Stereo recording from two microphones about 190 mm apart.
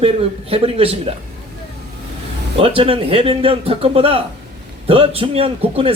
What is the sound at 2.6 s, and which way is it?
A man's voice, 30° right (ahead or behind).